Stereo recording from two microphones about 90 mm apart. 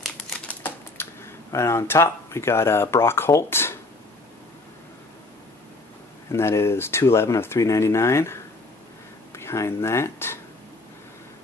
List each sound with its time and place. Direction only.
0.5 s typing: 25° left (ahead or behind)
6.3 s speech: 30° left (ahead or behind)